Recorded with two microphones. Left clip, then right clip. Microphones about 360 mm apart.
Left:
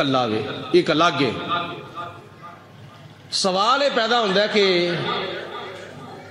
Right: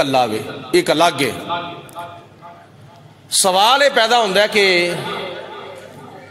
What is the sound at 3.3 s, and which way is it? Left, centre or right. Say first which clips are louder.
A man's voice: right 6 dB; right.